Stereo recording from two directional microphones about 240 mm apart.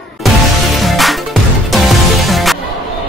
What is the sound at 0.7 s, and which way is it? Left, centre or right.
Music, centre.